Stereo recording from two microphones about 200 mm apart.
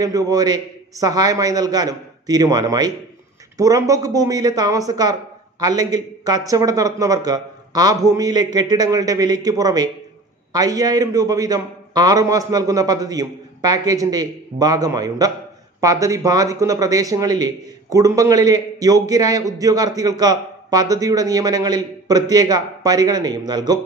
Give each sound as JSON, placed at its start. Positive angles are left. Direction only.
{"t": 0.0, "sound": "a man's voice", "side_deg": -20}